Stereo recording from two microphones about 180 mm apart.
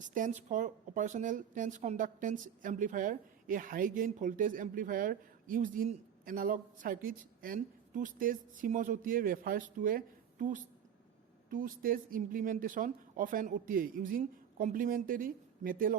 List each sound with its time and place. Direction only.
0.0 s speech: 45° right (ahead or behind)